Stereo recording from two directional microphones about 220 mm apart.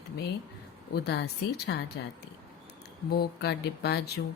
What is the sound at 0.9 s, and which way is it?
Speech, 45° left (ahead or behind).